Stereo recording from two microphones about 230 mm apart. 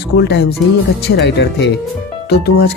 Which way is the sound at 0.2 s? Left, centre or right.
Left.